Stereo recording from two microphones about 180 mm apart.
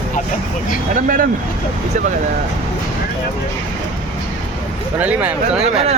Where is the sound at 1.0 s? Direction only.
50° right (ahead or behind).